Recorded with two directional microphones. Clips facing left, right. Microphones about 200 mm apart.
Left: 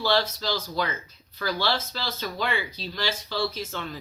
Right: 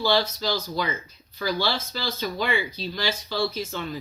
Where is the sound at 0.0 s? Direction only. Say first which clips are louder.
Right 1 dB; centre (ahead or behind).